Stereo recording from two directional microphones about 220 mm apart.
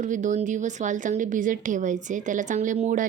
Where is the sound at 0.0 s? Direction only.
35° right (ahead or behind).